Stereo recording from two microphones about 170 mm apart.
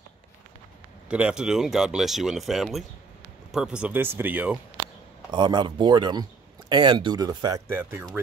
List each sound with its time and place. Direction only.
1.0 s speech: 5° right (ahead or behind)
5.3 s speech: 25° right (ahead or behind)